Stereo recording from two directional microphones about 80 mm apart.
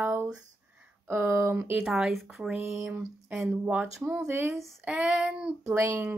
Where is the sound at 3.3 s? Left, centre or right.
Centre.